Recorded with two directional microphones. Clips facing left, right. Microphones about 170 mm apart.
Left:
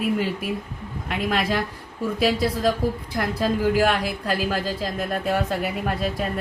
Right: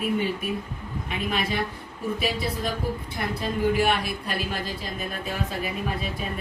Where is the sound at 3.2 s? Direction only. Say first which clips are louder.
Left 5 dB; 90° left.